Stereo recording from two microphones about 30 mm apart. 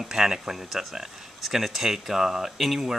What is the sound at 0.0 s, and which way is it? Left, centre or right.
Speech, centre.